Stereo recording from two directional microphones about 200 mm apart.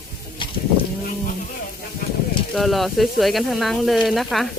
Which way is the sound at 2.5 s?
Centre (ahead or behind).